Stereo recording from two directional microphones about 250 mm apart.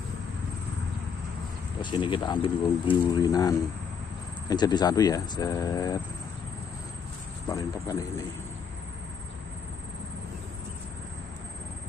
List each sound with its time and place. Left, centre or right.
1.8 s speech: centre
7.4 s speech: centre